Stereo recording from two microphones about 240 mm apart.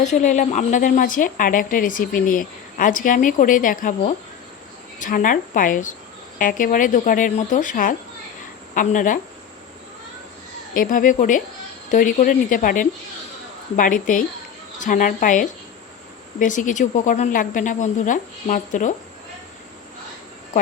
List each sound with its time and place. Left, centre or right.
0.0 s a woman's voice: left
10.8 s a woman's voice: left